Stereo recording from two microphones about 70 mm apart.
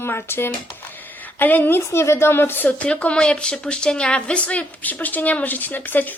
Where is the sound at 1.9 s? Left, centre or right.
Left.